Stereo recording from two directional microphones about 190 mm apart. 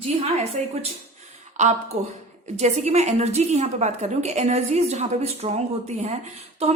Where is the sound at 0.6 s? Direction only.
40° right (ahead or behind).